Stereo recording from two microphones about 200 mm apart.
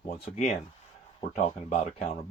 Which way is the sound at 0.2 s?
35° left (ahead or behind).